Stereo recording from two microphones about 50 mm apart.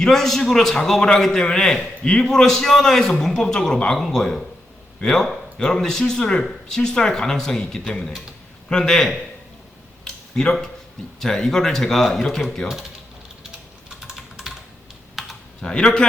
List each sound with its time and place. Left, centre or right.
0.0 s a man's voice: centre
3.9 s a man's voice: centre
10.0 s a sound: centre
11.2 s a man's voice: centre
14.1 s typing: centre
15.6 s a man's voice: centre